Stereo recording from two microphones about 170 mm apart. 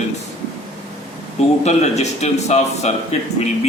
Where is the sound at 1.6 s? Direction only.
40° left (ahead or behind).